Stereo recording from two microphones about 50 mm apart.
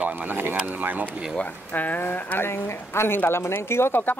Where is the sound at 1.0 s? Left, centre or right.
Left.